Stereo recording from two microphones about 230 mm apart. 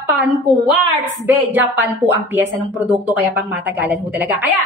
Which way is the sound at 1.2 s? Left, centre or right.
Centre.